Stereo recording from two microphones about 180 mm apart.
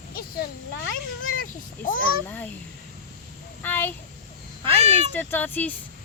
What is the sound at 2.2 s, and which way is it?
Speech, 10° left (ahead or behind).